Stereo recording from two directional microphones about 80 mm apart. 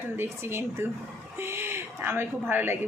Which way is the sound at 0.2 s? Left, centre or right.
Right.